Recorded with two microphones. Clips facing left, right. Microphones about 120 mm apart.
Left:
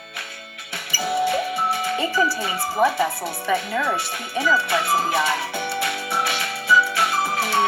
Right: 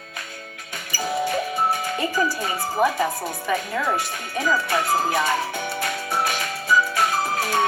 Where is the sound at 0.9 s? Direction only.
45° right (ahead or behind).